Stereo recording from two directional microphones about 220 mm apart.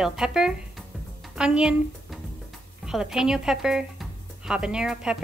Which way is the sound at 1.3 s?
5° right (ahead or behind).